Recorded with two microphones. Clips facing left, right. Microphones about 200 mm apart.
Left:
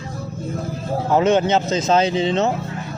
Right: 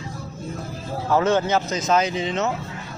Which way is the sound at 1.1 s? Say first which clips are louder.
Left 3 dB; 20° left (ahead or behind).